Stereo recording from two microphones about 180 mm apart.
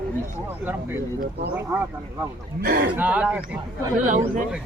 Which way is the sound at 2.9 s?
5° right (ahead or behind).